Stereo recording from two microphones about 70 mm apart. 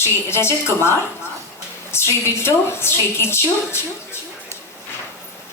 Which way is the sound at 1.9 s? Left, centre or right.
Left.